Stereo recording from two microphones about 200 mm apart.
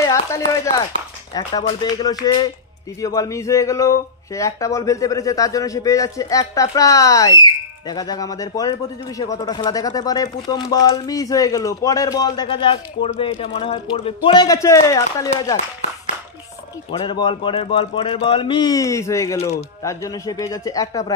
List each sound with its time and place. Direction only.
0.0 s a man's voice: 15° left (ahead or behind)
16.9 s a man's voice: 25° left (ahead or behind)